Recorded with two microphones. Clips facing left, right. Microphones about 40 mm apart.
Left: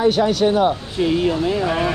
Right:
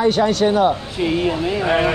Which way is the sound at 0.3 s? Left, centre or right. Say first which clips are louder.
Even; centre.